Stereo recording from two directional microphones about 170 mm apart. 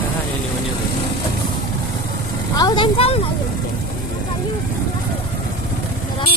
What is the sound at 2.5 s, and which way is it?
Speech, 25° left (ahead or behind).